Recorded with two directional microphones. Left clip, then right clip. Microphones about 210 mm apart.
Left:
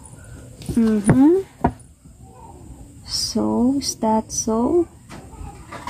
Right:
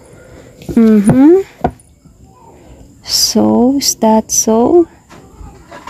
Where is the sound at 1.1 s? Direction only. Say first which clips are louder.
Right 8 dB; 55° right (ahead or behind).